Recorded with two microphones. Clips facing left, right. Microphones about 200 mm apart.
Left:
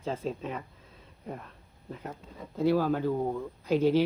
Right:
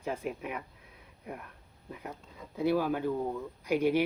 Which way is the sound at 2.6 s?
15° right (ahead or behind).